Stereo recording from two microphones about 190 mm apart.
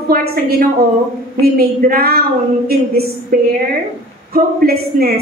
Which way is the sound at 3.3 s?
50° right (ahead or behind).